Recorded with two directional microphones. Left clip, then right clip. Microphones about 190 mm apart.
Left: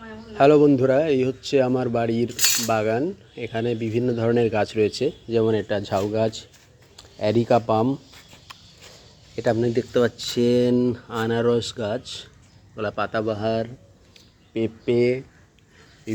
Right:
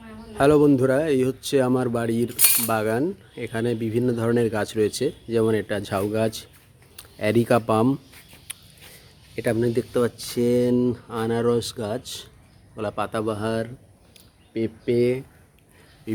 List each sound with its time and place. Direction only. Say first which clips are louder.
0.3 s speech: left 2 dB; 5° right (ahead or behind)
9.3 s speech: left 1 dB; 10° right (ahead or behind)